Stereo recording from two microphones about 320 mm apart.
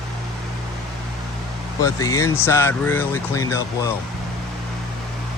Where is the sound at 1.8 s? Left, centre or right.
Centre.